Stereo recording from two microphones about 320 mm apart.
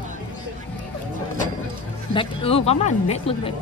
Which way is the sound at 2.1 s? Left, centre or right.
Centre.